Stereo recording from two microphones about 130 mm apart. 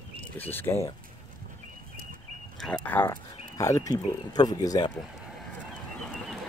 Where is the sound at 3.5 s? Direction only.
25° left (ahead or behind).